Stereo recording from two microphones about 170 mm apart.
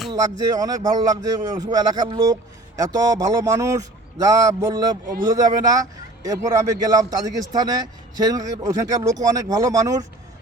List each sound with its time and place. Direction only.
0.1 s speech: 20° right (ahead or behind)